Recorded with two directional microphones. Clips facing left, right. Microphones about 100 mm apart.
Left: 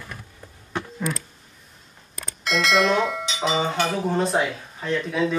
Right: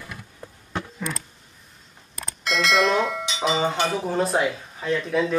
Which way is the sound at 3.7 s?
Centre (ahead or behind).